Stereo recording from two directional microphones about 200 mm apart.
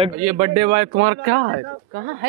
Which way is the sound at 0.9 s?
90° right.